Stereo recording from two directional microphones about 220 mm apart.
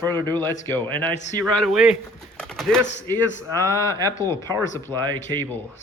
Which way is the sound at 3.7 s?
15° left (ahead or behind).